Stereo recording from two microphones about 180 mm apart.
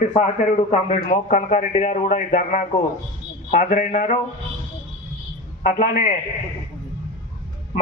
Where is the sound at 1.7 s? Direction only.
40° left (ahead or behind).